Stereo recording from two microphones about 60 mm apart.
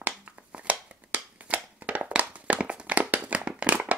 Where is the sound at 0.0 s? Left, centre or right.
Right.